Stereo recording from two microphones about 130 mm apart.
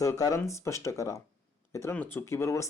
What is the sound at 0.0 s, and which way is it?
Speech, 25° left (ahead or behind).